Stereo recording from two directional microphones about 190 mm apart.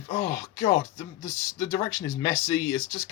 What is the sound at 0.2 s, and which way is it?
Speech, 20° left (ahead or behind).